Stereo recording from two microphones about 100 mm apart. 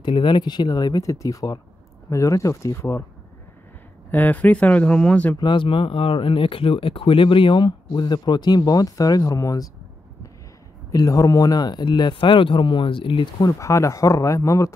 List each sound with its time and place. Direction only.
0.0 s speech: 55° left (ahead or behind); by 3.0 s 30° left (ahead or behind)
4.1 s speech: 15° left (ahead or behind)
5.4 s speech: 55° left (ahead or behind); by 9.7 s 35° left (ahead or behind)
10.9 s speech: 35° left (ahead or behind); by 13.3 s 60° left (ahead or behind)
13.4 s speech: 35° left (ahead or behind)